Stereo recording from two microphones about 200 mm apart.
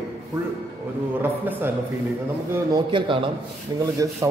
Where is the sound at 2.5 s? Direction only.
20° right (ahead or behind).